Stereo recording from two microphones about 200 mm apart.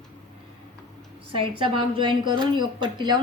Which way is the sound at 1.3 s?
25° right (ahead or behind).